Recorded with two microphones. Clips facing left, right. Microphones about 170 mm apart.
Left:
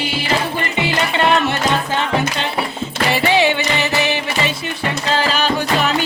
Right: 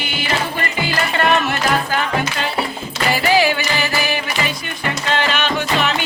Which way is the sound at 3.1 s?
25° left (ahead or behind).